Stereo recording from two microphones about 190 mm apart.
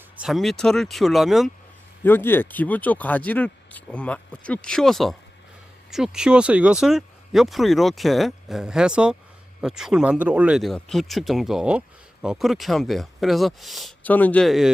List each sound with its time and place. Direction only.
0.2 s speech: centre (ahead or behind)
2.0 s speech: 10° left (ahead or behind)